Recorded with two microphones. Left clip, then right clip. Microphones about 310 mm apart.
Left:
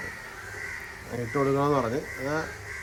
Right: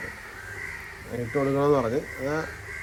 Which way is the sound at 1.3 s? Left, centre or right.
Centre.